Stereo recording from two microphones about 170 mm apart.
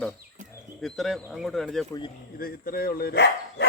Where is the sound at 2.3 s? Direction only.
60° left (ahead or behind); by 3.6 s 80° left.